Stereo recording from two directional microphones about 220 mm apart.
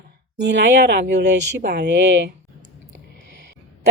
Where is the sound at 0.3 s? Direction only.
55° right (ahead or behind).